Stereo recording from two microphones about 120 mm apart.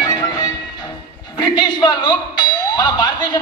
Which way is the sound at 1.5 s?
35° left (ahead or behind).